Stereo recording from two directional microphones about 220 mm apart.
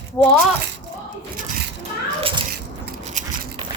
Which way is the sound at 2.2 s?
25° right (ahead or behind).